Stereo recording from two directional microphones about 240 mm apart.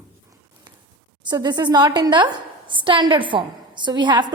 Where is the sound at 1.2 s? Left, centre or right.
Centre.